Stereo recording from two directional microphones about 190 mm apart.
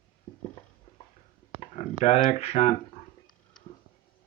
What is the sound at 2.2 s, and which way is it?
Speech, 35° left (ahead or behind).